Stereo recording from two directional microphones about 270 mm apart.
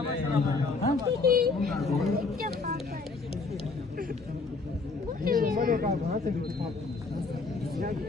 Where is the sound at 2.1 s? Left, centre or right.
Right.